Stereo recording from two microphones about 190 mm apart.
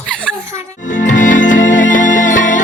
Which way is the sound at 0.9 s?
45° left (ahead or behind).